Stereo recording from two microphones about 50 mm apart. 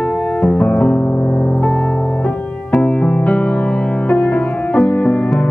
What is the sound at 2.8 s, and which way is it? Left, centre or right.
Music, left.